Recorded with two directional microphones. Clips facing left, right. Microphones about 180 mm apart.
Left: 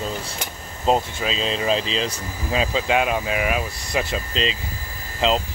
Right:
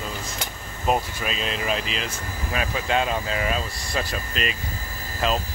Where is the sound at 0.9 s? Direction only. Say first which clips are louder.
Left 3 dB; 25° left (ahead or behind).